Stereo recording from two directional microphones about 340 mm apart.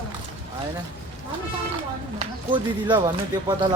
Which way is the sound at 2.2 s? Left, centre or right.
Centre.